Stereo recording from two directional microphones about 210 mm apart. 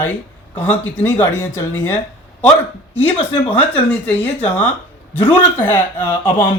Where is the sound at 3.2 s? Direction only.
25° left (ahead or behind).